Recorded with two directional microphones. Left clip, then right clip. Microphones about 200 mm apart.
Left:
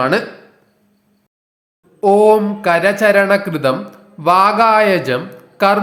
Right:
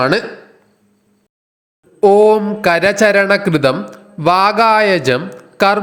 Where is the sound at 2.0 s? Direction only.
25° right (ahead or behind).